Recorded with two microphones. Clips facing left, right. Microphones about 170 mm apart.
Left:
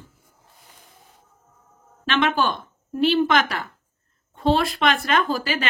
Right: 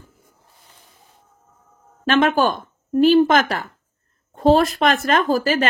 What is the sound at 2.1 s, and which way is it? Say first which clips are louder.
A woman's voice: right 5 dB; 45° right (ahead or behind).